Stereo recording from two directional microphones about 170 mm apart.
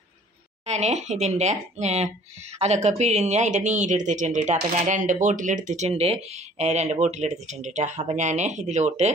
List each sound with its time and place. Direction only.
0.7 s speech: 40° right (ahead or behind)